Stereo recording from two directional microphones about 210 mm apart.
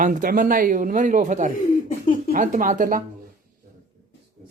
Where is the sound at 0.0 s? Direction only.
40° right (ahead or behind).